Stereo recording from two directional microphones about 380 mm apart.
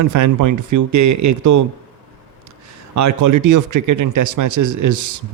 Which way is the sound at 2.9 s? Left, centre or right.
Right.